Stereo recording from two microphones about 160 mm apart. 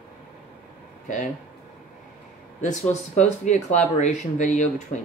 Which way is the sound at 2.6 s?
50° left (ahead or behind).